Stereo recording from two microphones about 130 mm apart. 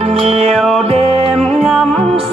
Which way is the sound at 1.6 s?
5° left (ahead or behind).